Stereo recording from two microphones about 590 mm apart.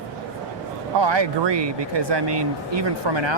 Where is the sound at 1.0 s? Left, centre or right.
Right.